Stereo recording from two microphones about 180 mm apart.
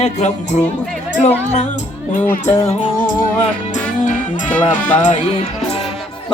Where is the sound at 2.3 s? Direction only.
40° left (ahead or behind).